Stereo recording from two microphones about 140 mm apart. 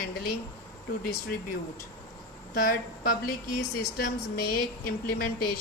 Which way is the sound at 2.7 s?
90° left.